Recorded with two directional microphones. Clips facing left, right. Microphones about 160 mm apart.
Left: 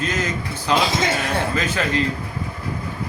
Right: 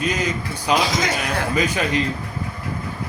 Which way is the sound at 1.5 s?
15° right (ahead or behind).